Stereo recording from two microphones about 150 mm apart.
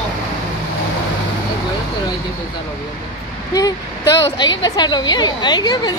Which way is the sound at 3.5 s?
25° left (ahead or behind).